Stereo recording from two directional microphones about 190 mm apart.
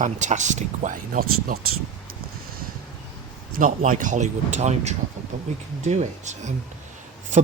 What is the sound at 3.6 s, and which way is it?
Speech, 45° right (ahead or behind).